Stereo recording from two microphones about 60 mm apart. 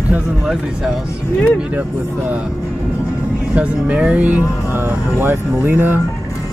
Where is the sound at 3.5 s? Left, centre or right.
Centre.